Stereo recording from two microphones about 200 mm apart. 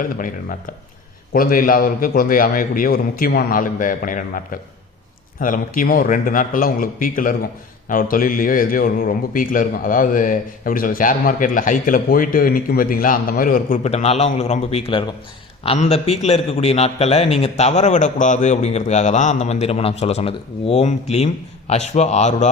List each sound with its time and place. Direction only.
0.0 s a man's voice: 40° left (ahead or behind)
5.4 s a man's voice: 45° left (ahead or behind)